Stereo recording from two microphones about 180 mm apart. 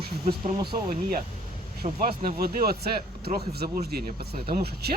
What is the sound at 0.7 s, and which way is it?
Speech, 50° right (ahead or behind).